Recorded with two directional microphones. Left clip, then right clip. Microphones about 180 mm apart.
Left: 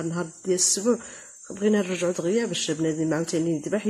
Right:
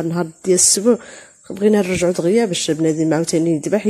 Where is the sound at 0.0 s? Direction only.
40° right (ahead or behind).